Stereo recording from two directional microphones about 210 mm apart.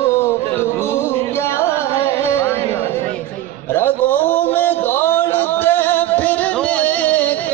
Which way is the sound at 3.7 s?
10° left (ahead or behind).